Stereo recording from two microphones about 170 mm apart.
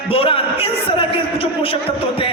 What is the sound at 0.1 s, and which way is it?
Speech, 35° left (ahead or behind).